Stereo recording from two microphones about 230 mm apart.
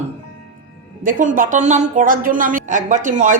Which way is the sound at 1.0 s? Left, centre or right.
Right.